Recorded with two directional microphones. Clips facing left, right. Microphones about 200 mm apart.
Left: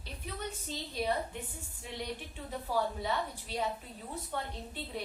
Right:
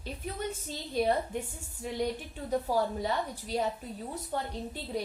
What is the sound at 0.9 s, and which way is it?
Speech, 45° right (ahead or behind).